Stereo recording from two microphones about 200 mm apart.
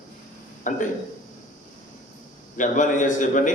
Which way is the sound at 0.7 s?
40° left (ahead or behind).